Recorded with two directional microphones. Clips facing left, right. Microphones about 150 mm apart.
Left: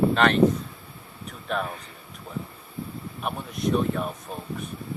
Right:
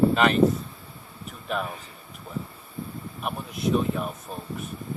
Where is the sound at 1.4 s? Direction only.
5° right (ahead or behind).